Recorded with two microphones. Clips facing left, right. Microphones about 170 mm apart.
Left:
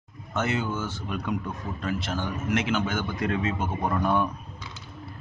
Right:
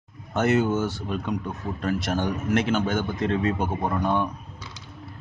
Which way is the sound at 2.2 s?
35° right (ahead or behind).